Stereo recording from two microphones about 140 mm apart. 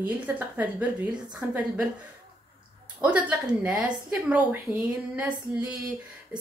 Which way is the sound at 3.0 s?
10° right (ahead or behind).